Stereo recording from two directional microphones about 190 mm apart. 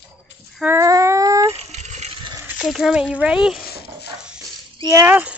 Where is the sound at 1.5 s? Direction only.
35° right (ahead or behind).